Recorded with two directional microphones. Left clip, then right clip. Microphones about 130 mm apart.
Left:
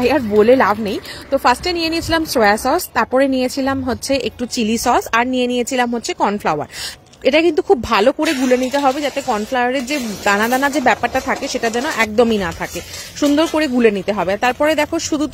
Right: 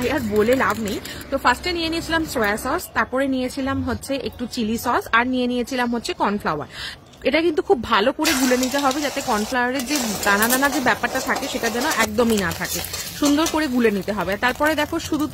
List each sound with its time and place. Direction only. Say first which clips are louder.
0.0 s speech: left 7 dB; 60° left (ahead or behind)
1.3 s a woman's voice: left 5 dB; 45° left (ahead or behind); by 15.2 s 25° left (ahead or behind)